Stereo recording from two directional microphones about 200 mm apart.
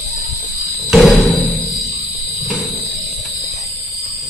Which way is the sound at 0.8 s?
Centre (ahead or behind).